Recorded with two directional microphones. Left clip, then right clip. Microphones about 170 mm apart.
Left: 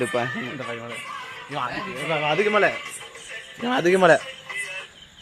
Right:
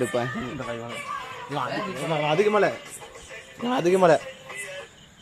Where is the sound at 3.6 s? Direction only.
40° left (ahead or behind).